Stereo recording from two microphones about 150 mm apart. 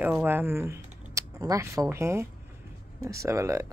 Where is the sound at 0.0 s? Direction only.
10° right (ahead or behind).